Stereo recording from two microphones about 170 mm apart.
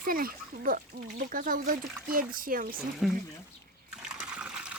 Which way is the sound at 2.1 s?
55° right (ahead or behind).